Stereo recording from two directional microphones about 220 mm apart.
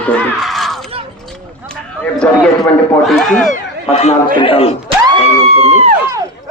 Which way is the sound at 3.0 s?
Centre (ahead or behind).